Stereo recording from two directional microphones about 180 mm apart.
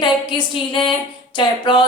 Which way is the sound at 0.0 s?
25° left (ahead or behind).